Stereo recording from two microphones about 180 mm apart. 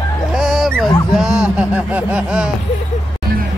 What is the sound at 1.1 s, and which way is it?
Speech, 5° right (ahead or behind).